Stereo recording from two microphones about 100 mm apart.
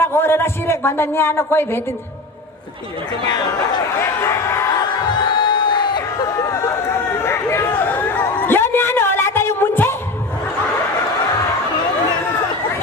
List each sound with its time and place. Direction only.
0.0 s a man's voice: 25° left (ahead or behind)
4.0 s speech: 25° left (ahead or behind)
4.8 s crowd: 50° left (ahead or behind)
6.2 s a sound: 30° left (ahead or behind)